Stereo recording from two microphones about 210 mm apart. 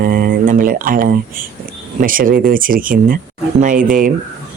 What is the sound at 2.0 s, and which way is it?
Speech, 40° right (ahead or behind).